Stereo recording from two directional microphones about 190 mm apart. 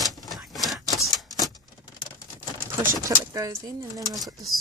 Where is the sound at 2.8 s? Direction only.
15° right (ahead or behind).